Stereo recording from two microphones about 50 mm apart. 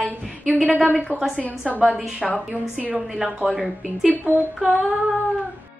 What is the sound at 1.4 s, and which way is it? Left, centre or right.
Speech, left.